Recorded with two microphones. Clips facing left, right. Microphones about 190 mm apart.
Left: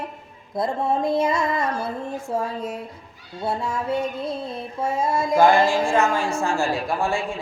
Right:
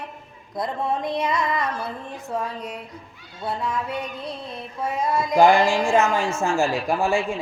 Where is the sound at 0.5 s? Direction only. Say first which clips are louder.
Left 3 dB; 25° left (ahead or behind).